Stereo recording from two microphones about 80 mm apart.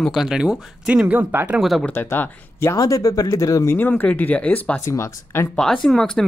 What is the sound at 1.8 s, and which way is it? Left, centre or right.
Speech, left.